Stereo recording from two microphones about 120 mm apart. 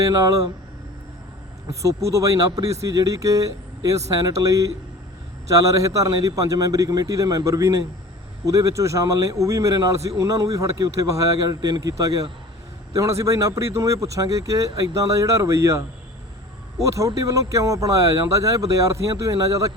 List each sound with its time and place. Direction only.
0.0 s a man's voice: 30° right (ahead or behind)
1.7 s a man's voice: 25° right (ahead or behind)
16.8 s a man's voice: 30° right (ahead or behind)